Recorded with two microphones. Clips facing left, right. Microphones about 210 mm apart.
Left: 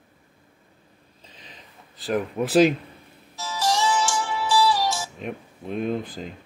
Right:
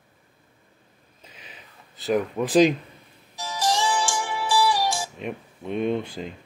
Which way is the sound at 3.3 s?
15° right (ahead or behind).